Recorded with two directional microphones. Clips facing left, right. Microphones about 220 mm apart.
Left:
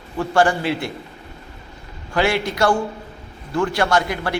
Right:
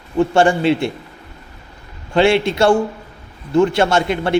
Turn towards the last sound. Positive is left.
turn(degrees=-25)  # may be behind; listen again after turning